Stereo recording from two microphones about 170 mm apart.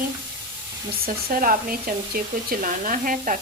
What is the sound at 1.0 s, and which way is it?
Speech, 55° right (ahead or behind).